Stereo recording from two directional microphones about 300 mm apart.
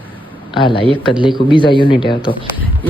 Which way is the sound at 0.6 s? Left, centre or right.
Centre.